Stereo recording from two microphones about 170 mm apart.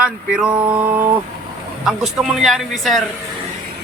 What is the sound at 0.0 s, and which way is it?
Speech, 5° right (ahead or behind).